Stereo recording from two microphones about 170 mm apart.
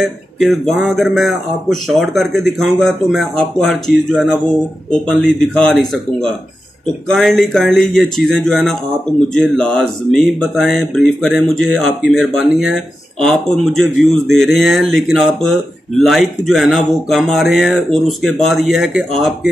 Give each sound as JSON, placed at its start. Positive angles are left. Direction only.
{"t": 0.0, "sound": "speech", "side_deg": 0}
{"t": 6.9, "sound": "speech", "side_deg": 0}